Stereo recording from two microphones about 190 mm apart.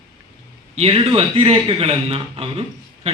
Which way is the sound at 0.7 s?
30° right (ahead or behind).